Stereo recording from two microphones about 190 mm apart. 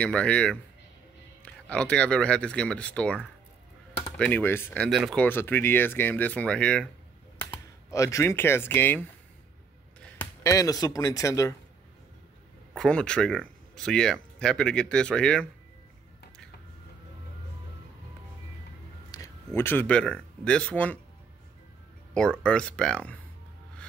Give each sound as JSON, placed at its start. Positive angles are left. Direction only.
{"t": 0.0, "sound": "speech", "side_deg": 5}
{"t": 7.9, "sound": "speech", "side_deg": 15}
{"t": 12.7, "sound": "speech", "side_deg": 5}
{"t": 19.0, "sound": "speech", "side_deg": 20}
{"t": 22.1, "sound": "speech", "side_deg": 5}